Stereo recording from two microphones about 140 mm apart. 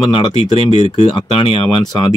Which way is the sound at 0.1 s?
40° left (ahead or behind).